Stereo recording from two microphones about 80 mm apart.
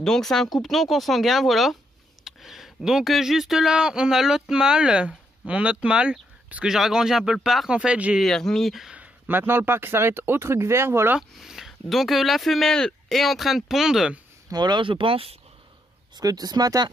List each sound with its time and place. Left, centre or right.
0.0 s speech: centre
7.7 s speech: centre
8.2 s speech: centre
8.9 s speech: right
11.1 s speech: centre
14.5 s speech: right
16.2 s speech: right